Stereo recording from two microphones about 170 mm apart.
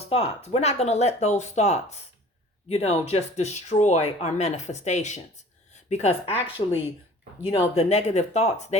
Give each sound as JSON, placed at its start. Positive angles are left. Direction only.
{"t": 0.1, "sound": "speech", "side_deg": 35}
{"t": 7.4, "sound": "speech", "side_deg": 35}